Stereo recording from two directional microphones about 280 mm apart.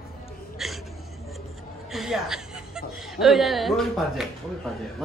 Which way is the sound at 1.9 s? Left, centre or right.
Centre.